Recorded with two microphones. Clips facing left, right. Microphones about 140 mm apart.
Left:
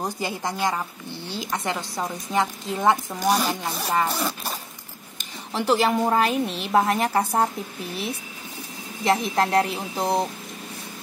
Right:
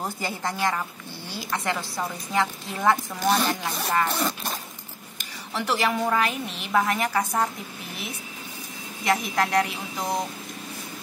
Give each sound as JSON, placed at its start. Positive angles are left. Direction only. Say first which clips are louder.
{"t": 0.0, "sound": "a woman's voice", "louder": "left 2 dB", "side_deg": 15}
{"t": 5.5, "sound": "a woman's voice", "louder": "left 4 dB", "side_deg": 30}
{"t": 9.0, "sound": "a woman's voice", "louder": "left 3 dB", "side_deg": 30}